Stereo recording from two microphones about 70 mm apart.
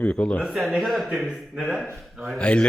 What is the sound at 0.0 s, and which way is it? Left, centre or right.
Speech, centre.